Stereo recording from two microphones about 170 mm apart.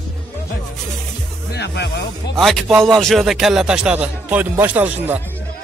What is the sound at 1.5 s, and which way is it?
Speech, 80° left.